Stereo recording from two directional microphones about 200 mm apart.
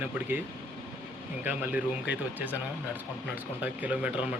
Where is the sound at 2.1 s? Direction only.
60° left (ahead or behind).